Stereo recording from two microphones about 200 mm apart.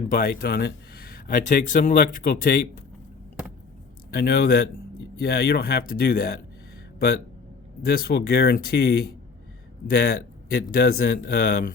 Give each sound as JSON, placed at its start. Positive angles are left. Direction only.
{"t": 0.1, "sound": "speech", "side_deg": 45}
{"t": 4.1, "sound": "speech", "side_deg": 55}
{"t": 7.8, "sound": "speech", "side_deg": 50}